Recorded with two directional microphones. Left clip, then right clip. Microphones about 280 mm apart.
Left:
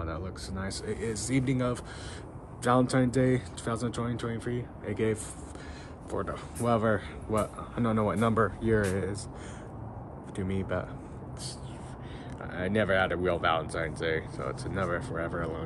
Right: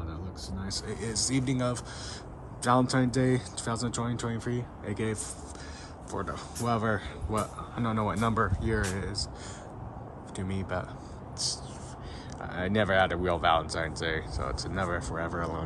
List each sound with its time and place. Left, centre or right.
0.0 s a sound: centre
0.7 s speech: centre
10.3 s speech: centre
12.4 s speech: centre